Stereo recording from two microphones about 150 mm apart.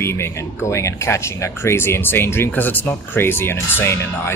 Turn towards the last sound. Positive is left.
turn(degrees=15)  # may be behind; listen again after turning